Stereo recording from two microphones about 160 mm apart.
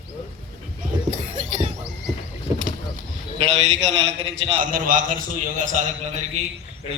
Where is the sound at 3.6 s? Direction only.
45° right (ahead or behind).